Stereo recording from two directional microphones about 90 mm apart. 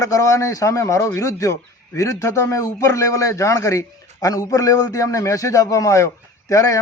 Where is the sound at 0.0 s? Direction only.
35° left (ahead or behind).